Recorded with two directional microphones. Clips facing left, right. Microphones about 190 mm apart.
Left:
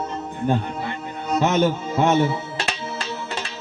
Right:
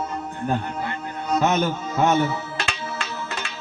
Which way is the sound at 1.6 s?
30° left (ahead or behind).